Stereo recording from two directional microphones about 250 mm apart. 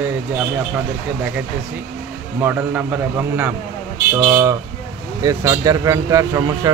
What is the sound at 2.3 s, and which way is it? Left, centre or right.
Speech, centre.